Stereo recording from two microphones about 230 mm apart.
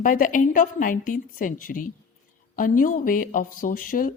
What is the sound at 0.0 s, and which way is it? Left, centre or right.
Speech, left.